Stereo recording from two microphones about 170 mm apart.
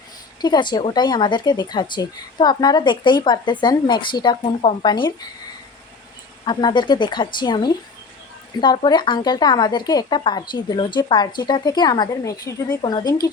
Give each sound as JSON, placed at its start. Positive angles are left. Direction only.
{"t": 0.4, "sound": "speech", "side_deg": 25}
{"t": 6.4, "sound": "speech", "side_deg": 25}